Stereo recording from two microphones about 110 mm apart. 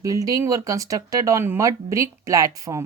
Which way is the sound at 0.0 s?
30° right (ahead or behind).